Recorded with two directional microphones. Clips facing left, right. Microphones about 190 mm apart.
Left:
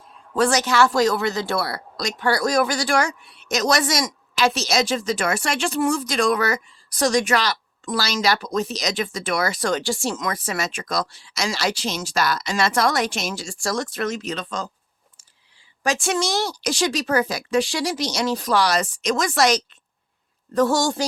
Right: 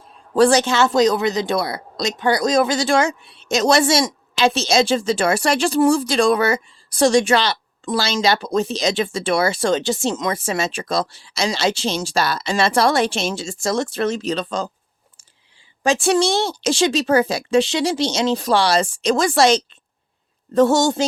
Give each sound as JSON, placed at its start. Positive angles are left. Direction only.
{"t": 0.3, "sound": "speech", "side_deg": -30}
{"t": 15.8, "sound": "speech", "side_deg": -30}